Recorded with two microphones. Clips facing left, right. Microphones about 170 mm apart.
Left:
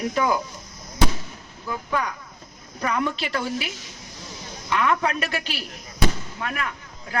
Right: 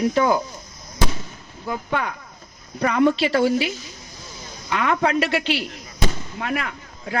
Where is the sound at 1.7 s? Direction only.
25° right (ahead or behind).